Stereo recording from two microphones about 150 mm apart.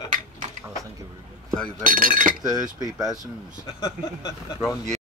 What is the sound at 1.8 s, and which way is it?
Speech, 65° right (ahead or behind).